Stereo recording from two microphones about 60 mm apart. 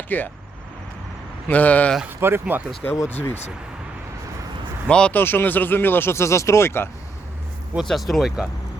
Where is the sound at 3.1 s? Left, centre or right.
Left.